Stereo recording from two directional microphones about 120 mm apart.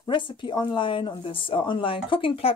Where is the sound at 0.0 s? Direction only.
40° left (ahead or behind).